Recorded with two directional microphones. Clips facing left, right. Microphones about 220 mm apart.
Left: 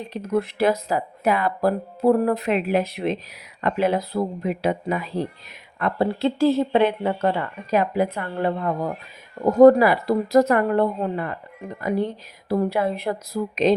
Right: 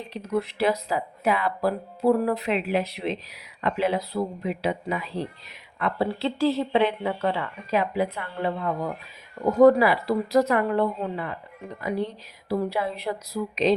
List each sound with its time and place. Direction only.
0.1 s speech: 50° left (ahead or behind)